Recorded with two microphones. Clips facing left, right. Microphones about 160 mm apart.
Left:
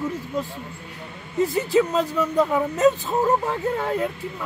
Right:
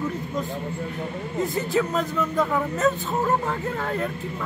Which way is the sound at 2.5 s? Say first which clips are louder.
Left 4 dB; 15° left (ahead or behind).